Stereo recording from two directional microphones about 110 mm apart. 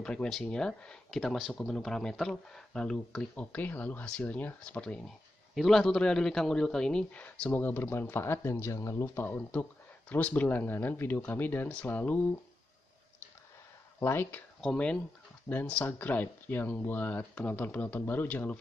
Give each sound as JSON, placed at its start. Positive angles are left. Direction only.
{"t": 0.0, "sound": "a man's voice", "side_deg": 10}
{"t": 13.9, "sound": "speech", "side_deg": 20}
{"t": 14.6, "sound": "a man's voice", "side_deg": 10}